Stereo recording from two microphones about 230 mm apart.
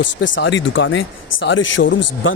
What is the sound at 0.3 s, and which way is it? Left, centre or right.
Speech, left.